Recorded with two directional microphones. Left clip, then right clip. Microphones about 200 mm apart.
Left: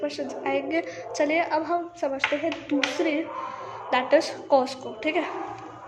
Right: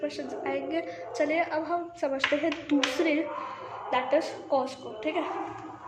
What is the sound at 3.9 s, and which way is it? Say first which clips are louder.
A woman's voice: left 5 dB; 25° left (ahead or behind).